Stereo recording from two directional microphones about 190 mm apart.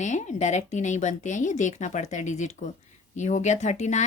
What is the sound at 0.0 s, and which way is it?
A woman's voice, 40° left (ahead or behind).